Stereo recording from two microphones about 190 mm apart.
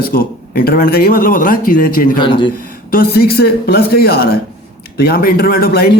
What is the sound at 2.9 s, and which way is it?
A man's voice, 50° left (ahead or behind).